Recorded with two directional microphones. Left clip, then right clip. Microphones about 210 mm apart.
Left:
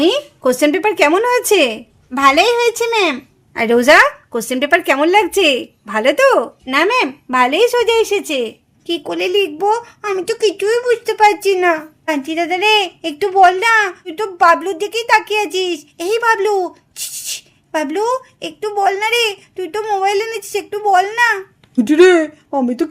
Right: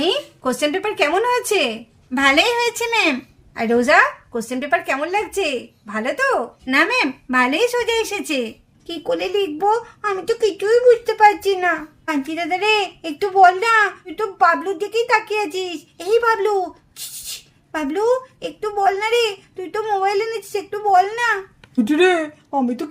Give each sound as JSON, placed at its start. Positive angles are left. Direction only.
{"t": 0.0, "sound": "speech", "side_deg": 35}
{"t": 3.5, "sound": "speech", "side_deg": 45}
{"t": 6.7, "sound": "speech", "side_deg": 35}